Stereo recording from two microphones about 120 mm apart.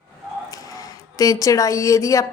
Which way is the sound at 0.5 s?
30° left (ahead or behind).